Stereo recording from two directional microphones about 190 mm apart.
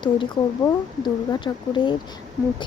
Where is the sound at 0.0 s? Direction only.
25° left (ahead or behind).